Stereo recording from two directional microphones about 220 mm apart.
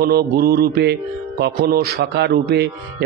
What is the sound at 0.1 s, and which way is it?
A man's voice, 45° right (ahead or behind).